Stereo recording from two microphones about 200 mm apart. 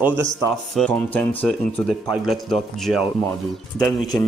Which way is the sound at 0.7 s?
5° left (ahead or behind).